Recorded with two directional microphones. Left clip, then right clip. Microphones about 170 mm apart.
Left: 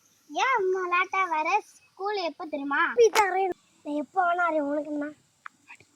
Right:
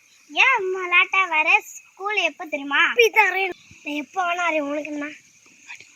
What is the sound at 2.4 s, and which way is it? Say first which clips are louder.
Speech: right 3 dB; 20° right (ahead or behind).